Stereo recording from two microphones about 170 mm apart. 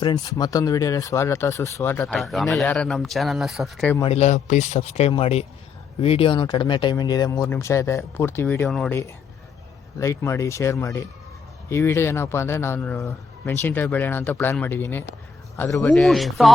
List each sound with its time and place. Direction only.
0.0 s speech: 25° left (ahead or behind); by 3.9 s centre (ahead or behind)
4.0 s speech: 40° left (ahead or behind); by 8.6 s 15° left (ahead or behind)
8.6 s speech: centre (ahead or behind)
8.9 s speech: 15° left (ahead or behind); by 16.5 s centre (ahead or behind)